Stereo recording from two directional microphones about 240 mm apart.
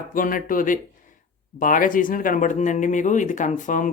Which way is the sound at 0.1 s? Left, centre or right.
Left.